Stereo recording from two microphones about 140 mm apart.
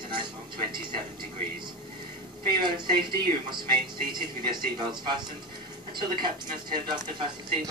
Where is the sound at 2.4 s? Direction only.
30° right (ahead or behind).